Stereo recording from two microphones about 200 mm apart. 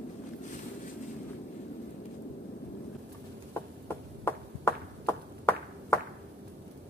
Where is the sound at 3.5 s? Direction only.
10° left (ahead or behind).